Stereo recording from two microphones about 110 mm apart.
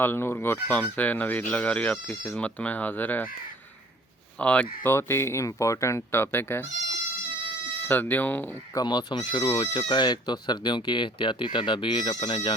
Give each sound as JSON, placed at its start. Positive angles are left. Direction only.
{"t": 0.0, "sound": "speech", "side_deg": 20}
{"t": 4.4, "sound": "speech", "side_deg": 10}
{"t": 4.9, "sound": "speech", "side_deg": 25}
{"t": 7.9, "sound": "speech", "side_deg": 15}
{"t": 8.7, "sound": "speech", "side_deg": 40}